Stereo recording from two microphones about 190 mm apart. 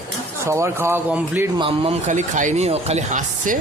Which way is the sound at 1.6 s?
30° right (ahead or behind).